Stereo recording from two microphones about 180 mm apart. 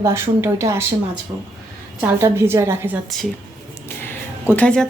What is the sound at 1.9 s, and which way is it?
A woman's voice, 15° right (ahead or behind).